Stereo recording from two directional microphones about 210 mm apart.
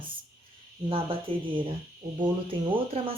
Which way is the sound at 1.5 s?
25° right (ahead or behind).